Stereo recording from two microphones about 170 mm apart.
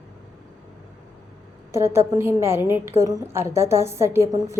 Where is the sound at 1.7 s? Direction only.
15° right (ahead or behind).